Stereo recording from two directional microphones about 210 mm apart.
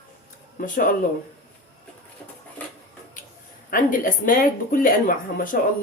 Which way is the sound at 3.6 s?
40° left (ahead or behind).